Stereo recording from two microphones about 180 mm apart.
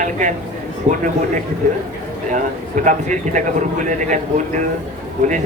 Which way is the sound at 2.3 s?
45° right (ahead or behind).